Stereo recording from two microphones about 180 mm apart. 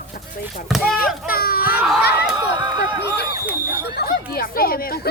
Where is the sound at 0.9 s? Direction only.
55° left (ahead or behind).